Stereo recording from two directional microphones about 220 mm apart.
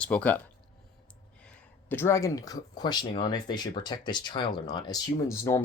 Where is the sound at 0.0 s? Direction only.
5° left (ahead or behind).